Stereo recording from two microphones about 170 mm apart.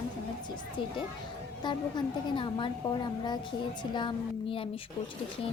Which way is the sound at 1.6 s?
25° left (ahead or behind).